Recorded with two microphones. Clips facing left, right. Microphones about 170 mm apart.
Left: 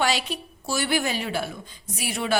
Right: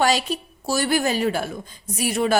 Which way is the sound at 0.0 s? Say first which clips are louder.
Right 5 dB; 40° right (ahead or behind).